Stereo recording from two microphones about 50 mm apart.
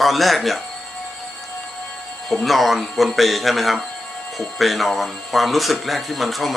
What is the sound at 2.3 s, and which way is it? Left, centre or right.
Speech, centre.